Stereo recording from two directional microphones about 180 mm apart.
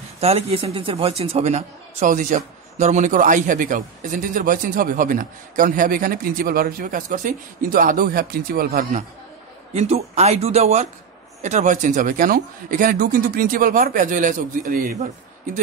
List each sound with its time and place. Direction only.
0.2 s a man's voice: 35° right (ahead or behind); by 9.0 s 55° right (ahead or behind)
9.8 s a man's voice: 35° right (ahead or behind)